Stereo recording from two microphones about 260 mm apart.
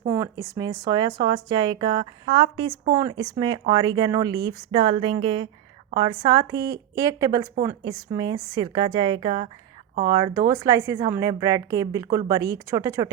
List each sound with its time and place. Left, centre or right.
0.0 s a woman's voice: centre